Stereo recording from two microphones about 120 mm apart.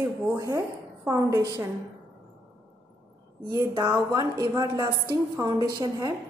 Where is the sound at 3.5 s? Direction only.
30° right (ahead or behind).